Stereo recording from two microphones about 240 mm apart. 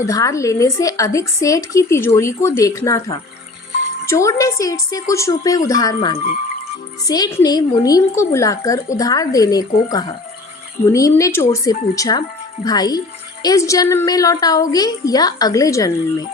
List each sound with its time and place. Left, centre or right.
0.0 s a woman's voice: centre
10.9 s a woman's voice: centre